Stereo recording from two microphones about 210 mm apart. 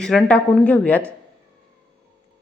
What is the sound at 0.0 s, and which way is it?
A woman's voice, 5° left (ahead or behind).